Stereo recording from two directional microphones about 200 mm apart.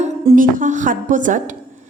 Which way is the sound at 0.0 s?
40° right (ahead or behind).